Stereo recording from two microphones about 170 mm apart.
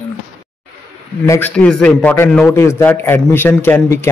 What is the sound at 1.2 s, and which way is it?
Speech, 20° left (ahead or behind).